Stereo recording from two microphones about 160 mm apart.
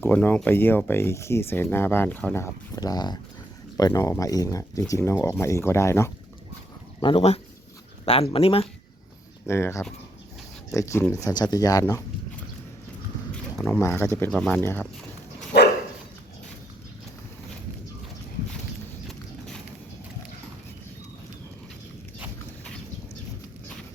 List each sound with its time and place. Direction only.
0.0 s speech: 10° left (ahead or behind)
7.0 s speech: 35° left (ahead or behind)
9.5 s speech: 15° left (ahead or behind)
13.3 s speech: 5° left (ahead or behind)